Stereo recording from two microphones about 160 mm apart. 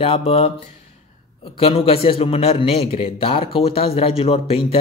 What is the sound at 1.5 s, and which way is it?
A man's voice, 35° left (ahead or behind).